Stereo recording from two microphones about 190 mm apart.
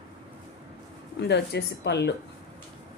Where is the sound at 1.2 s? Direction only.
60° left (ahead or behind).